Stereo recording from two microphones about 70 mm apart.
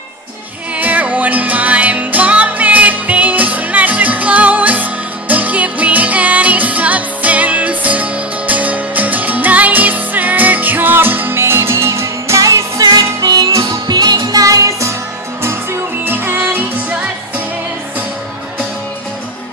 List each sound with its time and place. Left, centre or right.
0.7 s music: right
12.8 s music: right
16.1 s music: right